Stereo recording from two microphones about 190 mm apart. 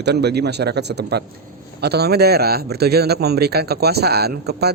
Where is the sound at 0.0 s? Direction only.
60° right (ahead or behind).